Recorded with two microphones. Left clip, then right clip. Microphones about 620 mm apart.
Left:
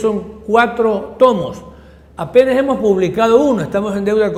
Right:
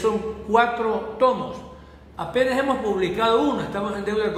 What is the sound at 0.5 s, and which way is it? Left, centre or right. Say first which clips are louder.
A man's voice: left 7 dB; left.